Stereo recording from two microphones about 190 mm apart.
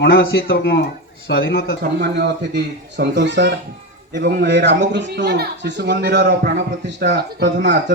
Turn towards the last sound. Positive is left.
turn(degrees=-65)  # may be behind; listen again after turning